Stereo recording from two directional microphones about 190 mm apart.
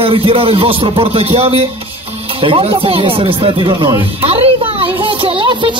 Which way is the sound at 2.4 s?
30° right (ahead or behind).